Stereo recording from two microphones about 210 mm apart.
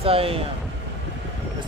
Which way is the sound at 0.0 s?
25° right (ahead or behind).